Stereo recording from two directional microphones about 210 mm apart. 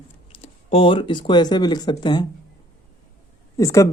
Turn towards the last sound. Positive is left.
turn(degrees=15)  # may be behind; listen again after turning